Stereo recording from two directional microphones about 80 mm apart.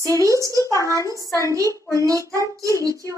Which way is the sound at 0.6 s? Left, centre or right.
Left.